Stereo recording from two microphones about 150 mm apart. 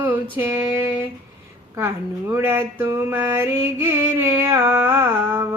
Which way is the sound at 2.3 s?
15° right (ahead or behind).